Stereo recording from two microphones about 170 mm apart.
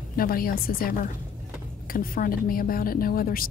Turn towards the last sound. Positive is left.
turn(degrees=60)  # may be behind; listen again after turning